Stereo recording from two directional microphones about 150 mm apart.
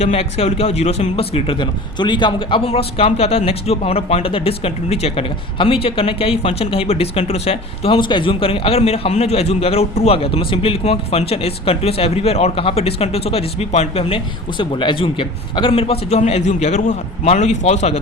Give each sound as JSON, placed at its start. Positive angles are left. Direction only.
{"t": 0.0, "sound": "speech", "side_deg": 40}
{"t": 2.6, "sound": "a man's voice", "side_deg": 40}